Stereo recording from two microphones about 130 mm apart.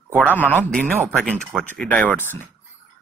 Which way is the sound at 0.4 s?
15° left (ahead or behind).